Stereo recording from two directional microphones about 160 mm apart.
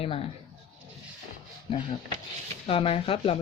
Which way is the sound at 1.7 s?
30° left (ahead or behind).